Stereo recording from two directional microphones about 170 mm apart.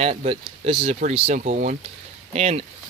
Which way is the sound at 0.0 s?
35° right (ahead or behind).